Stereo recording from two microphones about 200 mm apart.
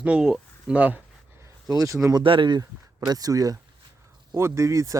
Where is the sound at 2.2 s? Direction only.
25° right (ahead or behind).